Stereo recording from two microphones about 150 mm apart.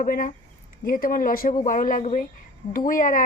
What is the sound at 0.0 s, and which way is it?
A woman's voice, 65° left (ahead or behind).